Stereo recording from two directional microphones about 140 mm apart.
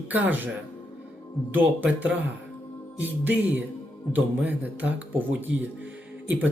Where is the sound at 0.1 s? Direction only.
10° right (ahead or behind).